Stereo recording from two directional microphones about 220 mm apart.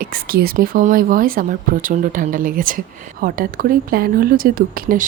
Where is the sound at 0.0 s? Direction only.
40° right (ahead or behind).